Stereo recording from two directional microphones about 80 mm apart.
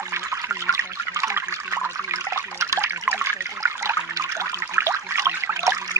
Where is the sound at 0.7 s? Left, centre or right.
Right.